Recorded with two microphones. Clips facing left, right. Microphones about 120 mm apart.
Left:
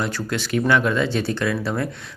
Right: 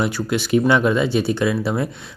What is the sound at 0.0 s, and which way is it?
Speech, 15° right (ahead or behind).